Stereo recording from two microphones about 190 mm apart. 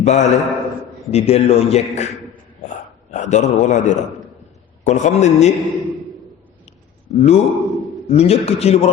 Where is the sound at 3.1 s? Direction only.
40° left (ahead or behind).